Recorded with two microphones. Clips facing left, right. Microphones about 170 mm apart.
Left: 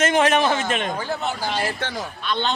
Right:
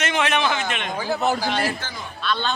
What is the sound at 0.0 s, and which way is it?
Speech, 45° left (ahead or behind).